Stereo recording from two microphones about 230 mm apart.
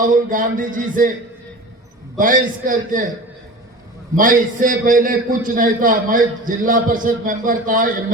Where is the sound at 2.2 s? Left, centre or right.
Right.